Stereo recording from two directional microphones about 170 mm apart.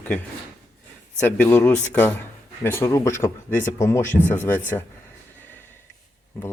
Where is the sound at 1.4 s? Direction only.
10° left (ahead or behind).